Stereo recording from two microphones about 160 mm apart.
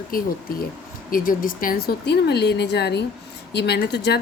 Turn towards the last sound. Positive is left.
turn(degrees=90)